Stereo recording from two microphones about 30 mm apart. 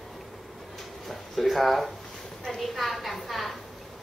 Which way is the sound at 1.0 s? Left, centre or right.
Centre.